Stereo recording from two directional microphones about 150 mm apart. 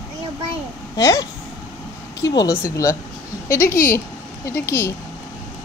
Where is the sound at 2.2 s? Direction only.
25° left (ahead or behind).